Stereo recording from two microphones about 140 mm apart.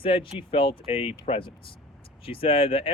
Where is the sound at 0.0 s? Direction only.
40° left (ahead or behind).